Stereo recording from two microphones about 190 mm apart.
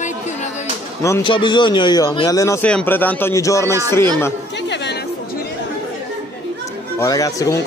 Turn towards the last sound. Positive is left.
turn(degrees=20)  # may be behind; listen again after turning